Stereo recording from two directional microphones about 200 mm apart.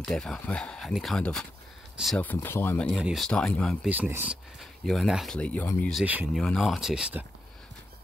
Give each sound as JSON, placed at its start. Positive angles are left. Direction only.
{"t": 0.0, "sound": "speech", "side_deg": 0}
{"t": 2.9, "sound": "speech", "side_deg": -5}
{"t": 6.0, "sound": "speech", "side_deg": -10}